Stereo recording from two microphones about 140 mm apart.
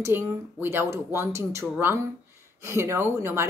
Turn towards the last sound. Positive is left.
turn(degrees=-20)  # may be behind; listen again after turning